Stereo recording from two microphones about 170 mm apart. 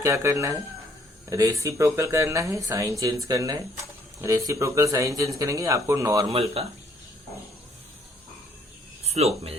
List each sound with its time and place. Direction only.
0.0 s speech: 15° right (ahead or behind)
6.2 s speech: 35° right (ahead or behind)
9.0 s speech: 40° right (ahead or behind)